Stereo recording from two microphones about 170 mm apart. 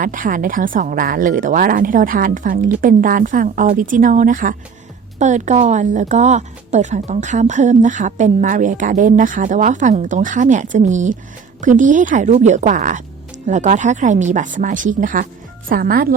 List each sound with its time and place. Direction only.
0.0 s speech: 50° right (ahead or behind)